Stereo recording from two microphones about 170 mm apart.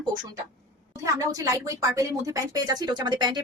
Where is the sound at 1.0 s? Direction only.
20° right (ahead or behind).